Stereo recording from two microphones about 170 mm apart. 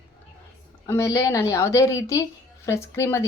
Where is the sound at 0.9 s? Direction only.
15° left (ahead or behind).